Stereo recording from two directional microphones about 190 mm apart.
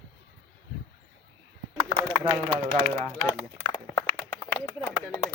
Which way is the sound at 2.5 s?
30° right (ahead or behind).